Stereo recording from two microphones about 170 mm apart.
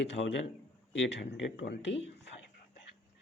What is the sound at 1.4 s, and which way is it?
Speech, 90° left.